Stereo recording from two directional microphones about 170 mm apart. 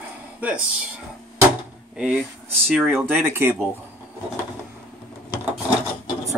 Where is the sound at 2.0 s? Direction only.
5° right (ahead or behind).